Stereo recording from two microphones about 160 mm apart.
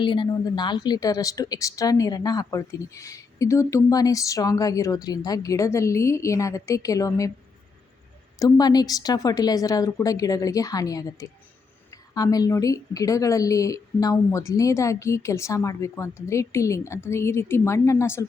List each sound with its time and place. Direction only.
0.0 s a woman's voice: 30° left (ahead or behind)
8.4 s a woman's voice: 25° left (ahead or behind)